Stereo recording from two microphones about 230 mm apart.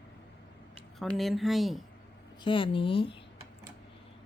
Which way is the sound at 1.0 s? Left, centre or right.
Centre.